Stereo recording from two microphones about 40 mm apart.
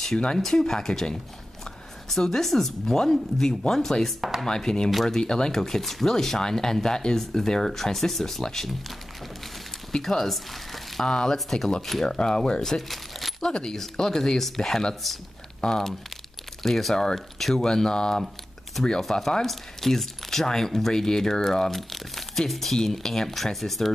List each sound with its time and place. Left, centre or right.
0.4 s speech: centre
9.9 s speech: centre
11.1 s speech: centre
12.8 s keys jangling: centre
13.4 s speech: centre
19.0 s speech: centre